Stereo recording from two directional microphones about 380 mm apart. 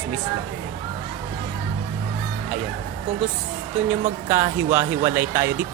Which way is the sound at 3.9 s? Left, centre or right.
Centre.